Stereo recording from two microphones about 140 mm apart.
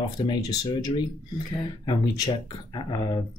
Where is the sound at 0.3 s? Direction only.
30° left (ahead or behind).